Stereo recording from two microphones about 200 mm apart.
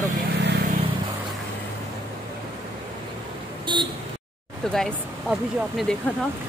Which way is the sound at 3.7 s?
25° right (ahead or behind).